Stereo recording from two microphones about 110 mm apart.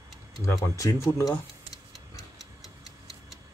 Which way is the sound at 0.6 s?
30° left (ahead or behind).